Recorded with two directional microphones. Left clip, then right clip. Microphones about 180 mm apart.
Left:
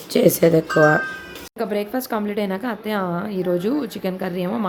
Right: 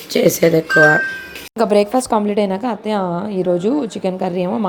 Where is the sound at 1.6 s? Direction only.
25° right (ahead or behind).